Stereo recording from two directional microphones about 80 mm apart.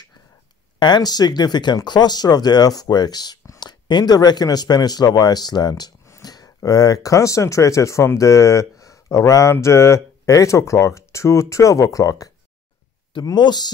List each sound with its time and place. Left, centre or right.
0.7 s speech: left
13.2 s speech: left